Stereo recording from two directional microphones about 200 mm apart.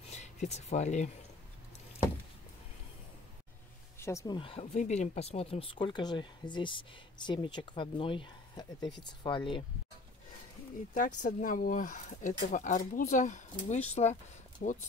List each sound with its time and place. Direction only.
0.1 s speech: 35° left (ahead or behind)
4.0 s speech: 15° left (ahead or behind)
4.4 s speech: 30° left (ahead or behind)
11.0 s speech: 40° left (ahead or behind)